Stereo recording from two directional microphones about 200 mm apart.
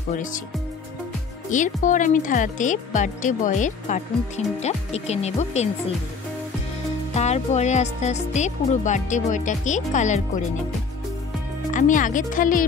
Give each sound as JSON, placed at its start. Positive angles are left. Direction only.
{"t": 1.5, "sound": "speech", "side_deg": 40}
{"t": 7.2, "sound": "speech", "side_deg": 35}
{"t": 11.7, "sound": "speech", "side_deg": 40}